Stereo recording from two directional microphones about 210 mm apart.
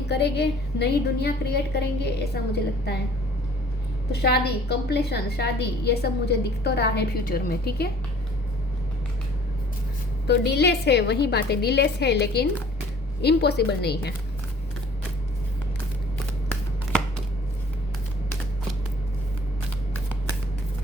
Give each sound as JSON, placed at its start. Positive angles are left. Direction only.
{"t": 0.1, "sound": "a woman's voice", "side_deg": 50}
{"t": 4.1, "sound": "a woman's voice", "side_deg": 50}
{"t": 10.2, "sound": "a woman's voice", "side_deg": 50}